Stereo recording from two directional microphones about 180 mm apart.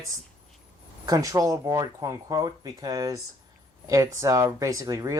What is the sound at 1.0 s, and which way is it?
Speech, 20° right (ahead or behind).